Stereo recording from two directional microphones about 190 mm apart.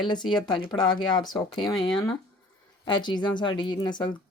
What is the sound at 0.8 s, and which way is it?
Speech, 25° left (ahead or behind).